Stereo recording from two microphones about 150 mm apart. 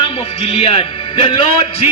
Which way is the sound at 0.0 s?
40° left (ahead or behind).